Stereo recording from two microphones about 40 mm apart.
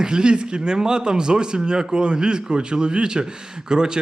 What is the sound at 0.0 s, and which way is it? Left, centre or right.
Speech, right.